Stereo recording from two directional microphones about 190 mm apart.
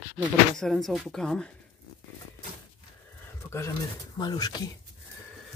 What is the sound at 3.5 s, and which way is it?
Speech, 15° left (ahead or behind).